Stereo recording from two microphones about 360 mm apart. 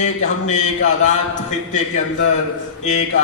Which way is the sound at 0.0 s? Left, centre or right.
Centre.